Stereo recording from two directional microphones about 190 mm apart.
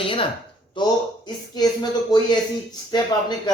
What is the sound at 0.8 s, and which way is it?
Speech, 25° left (ahead or behind).